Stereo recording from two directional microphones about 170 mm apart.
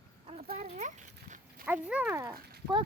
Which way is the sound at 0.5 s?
45° right (ahead or behind).